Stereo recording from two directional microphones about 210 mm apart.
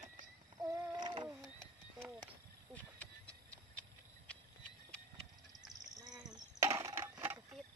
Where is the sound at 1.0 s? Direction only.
20° right (ahead or behind).